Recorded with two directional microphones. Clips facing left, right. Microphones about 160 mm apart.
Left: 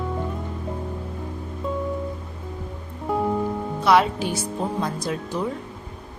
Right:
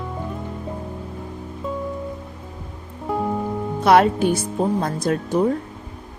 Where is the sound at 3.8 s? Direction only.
50° right (ahead or behind).